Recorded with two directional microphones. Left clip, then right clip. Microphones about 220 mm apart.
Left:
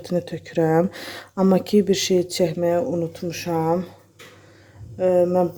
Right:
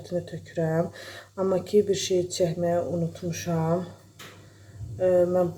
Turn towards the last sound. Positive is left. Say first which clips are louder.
# left 3 dB
turn(degrees=35)  # may be behind; listen again after turning